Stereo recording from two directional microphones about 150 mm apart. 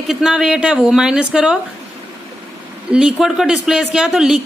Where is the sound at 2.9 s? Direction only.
5° right (ahead or behind).